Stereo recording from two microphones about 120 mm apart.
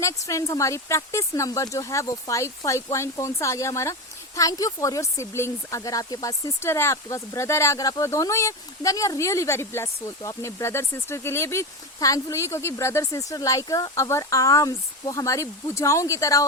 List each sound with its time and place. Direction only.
0.0 s speech: 25° left (ahead or behind)